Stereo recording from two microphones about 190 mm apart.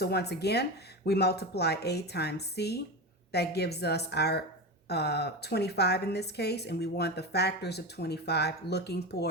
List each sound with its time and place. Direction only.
0.0 s a woman's voice: 60° left (ahead or behind)